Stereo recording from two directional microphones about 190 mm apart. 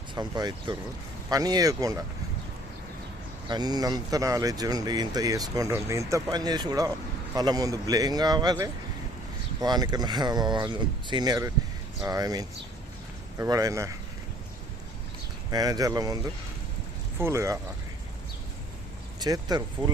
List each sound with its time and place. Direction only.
0.1 s speech: 20° right (ahead or behind)
3.5 s speech: 20° right (ahead or behind)
15.4 s speech: 20° right (ahead or behind)
17.2 s speech: 15° right (ahead or behind)
19.2 s speech: 20° right (ahead or behind)